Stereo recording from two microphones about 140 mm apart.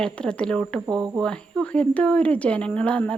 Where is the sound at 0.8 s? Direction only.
30° right (ahead or behind).